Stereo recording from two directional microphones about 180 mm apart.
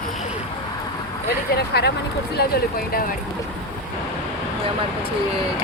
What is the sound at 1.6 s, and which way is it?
Speech, 60° left (ahead or behind).